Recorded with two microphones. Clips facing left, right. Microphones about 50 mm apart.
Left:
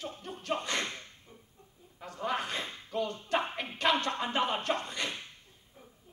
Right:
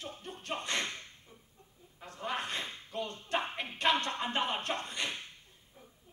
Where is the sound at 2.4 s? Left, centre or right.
Centre.